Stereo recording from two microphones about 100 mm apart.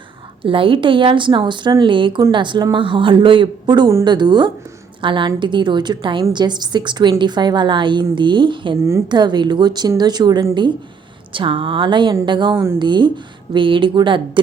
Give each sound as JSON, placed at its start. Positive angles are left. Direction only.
{"t": 0.4, "sound": "a woman's voice", "side_deg": -60}
{"t": 11.3, "sound": "a woman's voice", "side_deg": -60}